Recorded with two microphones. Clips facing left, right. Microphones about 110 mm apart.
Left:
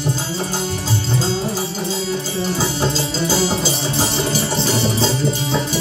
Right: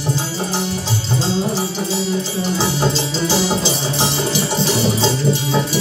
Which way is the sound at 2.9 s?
40° left (ahead or behind).